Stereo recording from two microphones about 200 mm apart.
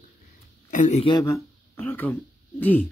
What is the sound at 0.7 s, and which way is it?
Speech, 35° left (ahead or behind).